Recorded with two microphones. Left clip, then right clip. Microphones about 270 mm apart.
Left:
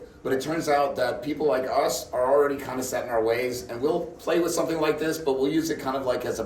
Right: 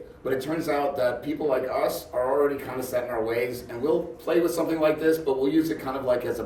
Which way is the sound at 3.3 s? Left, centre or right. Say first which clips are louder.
Left 2 dB; centre.